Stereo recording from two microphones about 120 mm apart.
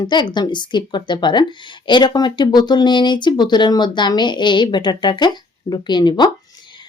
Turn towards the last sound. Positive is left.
turn(degrees=40)  # may be behind; listen again after turning